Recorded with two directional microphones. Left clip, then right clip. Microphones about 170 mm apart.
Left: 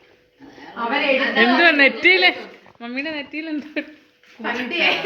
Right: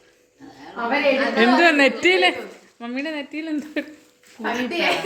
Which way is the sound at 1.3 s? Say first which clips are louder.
Left 2 dB; 20° right (ahead or behind).